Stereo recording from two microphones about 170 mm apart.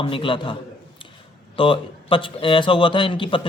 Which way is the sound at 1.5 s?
30° left (ahead or behind).